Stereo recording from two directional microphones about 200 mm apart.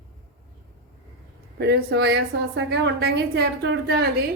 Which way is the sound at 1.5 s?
50° right (ahead or behind).